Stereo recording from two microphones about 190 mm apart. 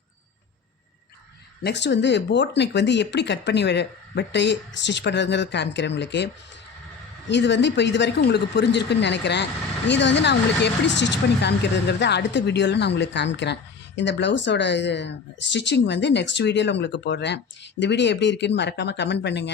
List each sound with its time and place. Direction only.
1.6 s speech: 65° left (ahead or behind)